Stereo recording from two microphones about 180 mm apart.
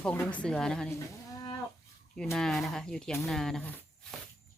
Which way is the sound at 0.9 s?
20° left (ahead or behind).